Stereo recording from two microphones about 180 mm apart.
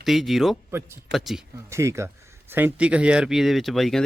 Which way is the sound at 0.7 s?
15° right (ahead or behind).